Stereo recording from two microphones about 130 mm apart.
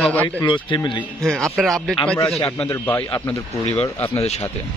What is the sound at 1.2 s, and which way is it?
Speech, centre (ahead or behind).